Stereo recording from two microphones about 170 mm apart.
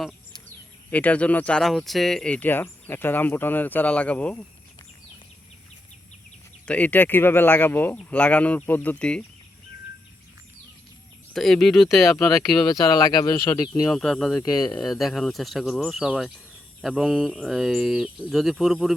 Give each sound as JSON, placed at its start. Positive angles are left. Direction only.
{"t": 0.9, "sound": "speech", "side_deg": 10}
{"t": 6.7, "sound": "speech", "side_deg": 10}
{"t": 11.3, "sound": "speech", "side_deg": 5}
{"t": 12.2, "sound": "speech", "side_deg": 20}
{"t": 13.9, "sound": "speech", "side_deg": 0}